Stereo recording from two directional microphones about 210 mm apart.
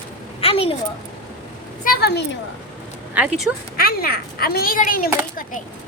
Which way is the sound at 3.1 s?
5° right (ahead or behind).